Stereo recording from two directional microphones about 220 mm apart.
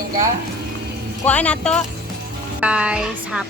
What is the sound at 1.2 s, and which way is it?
Speech, 5° left (ahead or behind).